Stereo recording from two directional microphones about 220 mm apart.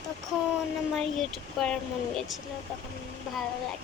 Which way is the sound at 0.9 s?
Centre (ahead or behind).